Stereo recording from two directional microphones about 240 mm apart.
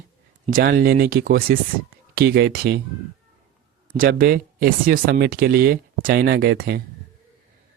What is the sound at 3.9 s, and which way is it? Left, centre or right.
Speech, right.